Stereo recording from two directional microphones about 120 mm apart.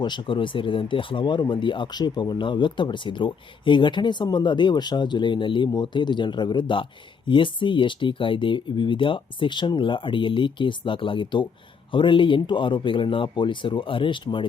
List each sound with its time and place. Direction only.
0.0 s speech: 40° left (ahead or behind)